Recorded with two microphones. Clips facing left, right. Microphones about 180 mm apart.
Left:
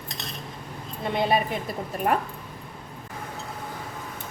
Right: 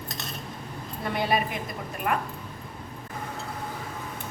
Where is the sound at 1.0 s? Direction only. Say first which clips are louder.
Left 3 dB; 25° left (ahead or behind).